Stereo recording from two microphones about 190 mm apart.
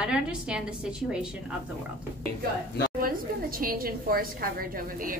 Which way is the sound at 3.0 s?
50° right (ahead or behind).